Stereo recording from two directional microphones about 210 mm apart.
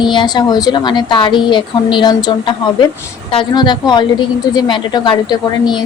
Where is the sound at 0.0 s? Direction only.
20° left (ahead or behind).